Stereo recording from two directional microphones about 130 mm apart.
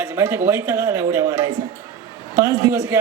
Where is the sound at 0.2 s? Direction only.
20° right (ahead or behind).